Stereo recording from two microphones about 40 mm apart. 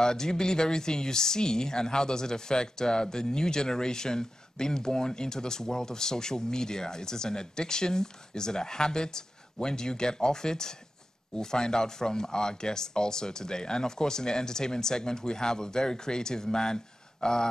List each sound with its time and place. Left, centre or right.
0.0 s speech: centre